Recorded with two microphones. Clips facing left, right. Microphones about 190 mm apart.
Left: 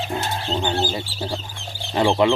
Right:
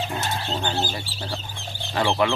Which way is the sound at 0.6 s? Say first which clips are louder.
Left 4 dB; 15° left (ahead or behind).